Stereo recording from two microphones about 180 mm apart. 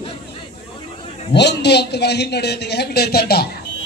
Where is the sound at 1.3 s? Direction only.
70° left (ahead or behind).